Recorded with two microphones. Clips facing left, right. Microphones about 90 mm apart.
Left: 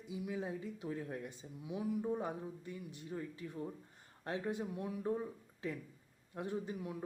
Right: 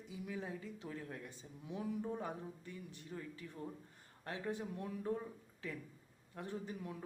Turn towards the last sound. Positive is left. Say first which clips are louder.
# left 4 dB
turn(degrees=15)  # may be behind; listen again after turning